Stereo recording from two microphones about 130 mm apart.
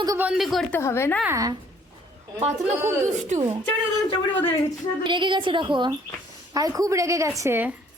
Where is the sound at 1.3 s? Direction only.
25° right (ahead or behind).